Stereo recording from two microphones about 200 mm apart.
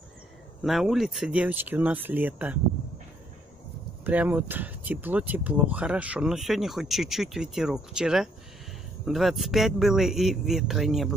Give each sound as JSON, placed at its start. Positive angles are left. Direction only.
{"t": 0.7, "sound": "speech", "side_deg": 0}
{"t": 4.0, "sound": "speech", "side_deg": -10}